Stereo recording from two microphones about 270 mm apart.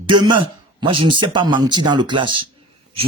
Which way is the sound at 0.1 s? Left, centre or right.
Centre.